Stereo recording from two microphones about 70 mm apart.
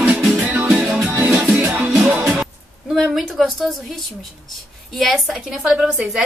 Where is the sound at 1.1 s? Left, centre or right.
Right.